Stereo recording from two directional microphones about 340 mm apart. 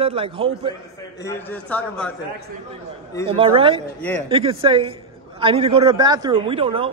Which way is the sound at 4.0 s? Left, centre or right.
Centre.